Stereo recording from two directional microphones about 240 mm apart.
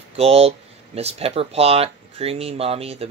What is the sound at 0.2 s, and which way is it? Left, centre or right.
Speech, right.